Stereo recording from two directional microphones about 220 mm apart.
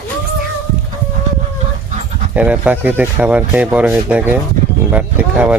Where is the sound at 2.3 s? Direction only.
5° right (ahead or behind).